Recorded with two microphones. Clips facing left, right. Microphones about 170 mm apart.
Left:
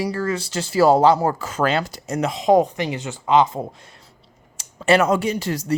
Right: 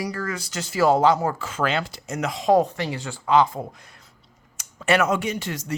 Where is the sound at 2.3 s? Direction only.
20° left (ahead or behind).